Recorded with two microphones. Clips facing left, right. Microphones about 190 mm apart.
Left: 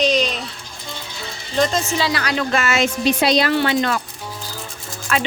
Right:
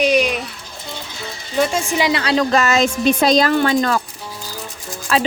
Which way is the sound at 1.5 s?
10° right (ahead or behind).